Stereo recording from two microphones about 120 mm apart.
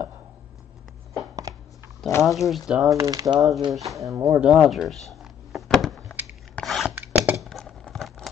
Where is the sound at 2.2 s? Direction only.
Centre (ahead or behind).